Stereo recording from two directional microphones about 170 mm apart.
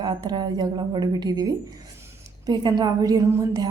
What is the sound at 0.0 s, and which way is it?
A woman's voice, 25° right (ahead or behind).